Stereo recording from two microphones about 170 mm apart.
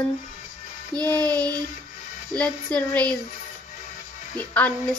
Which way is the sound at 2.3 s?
5° left (ahead or behind).